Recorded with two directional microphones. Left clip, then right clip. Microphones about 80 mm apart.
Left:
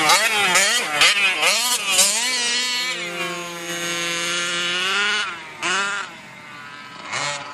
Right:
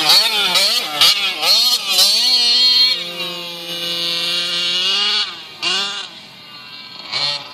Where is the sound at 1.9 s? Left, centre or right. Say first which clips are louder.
Right 6 dB; left.